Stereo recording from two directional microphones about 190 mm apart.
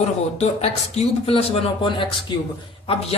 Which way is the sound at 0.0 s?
35° left (ahead or behind).